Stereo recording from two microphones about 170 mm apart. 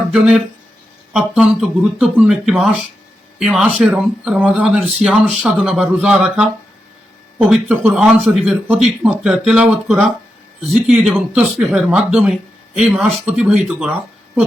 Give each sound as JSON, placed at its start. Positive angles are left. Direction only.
{"t": 0.1, "sound": "speech", "side_deg": 0}